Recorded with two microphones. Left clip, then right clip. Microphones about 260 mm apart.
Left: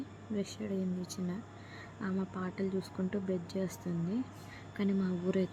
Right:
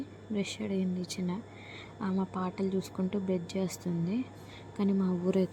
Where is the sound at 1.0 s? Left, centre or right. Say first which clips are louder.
Right 4 dB; centre.